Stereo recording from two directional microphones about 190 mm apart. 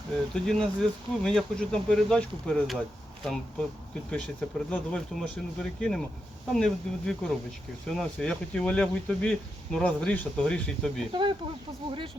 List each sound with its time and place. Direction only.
0.3 s speech: 5° left (ahead or behind)
4.1 s speech: 5° left (ahead or behind)
11.1 s speech: 25° right (ahead or behind)